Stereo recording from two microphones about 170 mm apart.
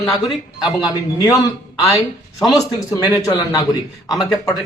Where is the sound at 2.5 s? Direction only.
20° left (ahead or behind).